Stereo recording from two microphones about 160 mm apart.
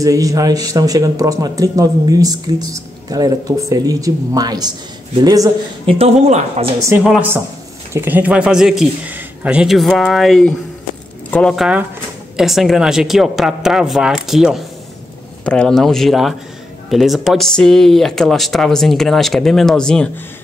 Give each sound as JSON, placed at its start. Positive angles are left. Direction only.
{"t": 0.0, "sound": "speech", "side_deg": -20}
{"t": 5.9, "sound": "speech", "side_deg": -40}
{"t": 7.0, "sound": "speech", "side_deg": 0}
{"t": 7.9, "sound": "speech", "side_deg": -10}
{"t": 11.5, "sound": "speech", "side_deg": -5}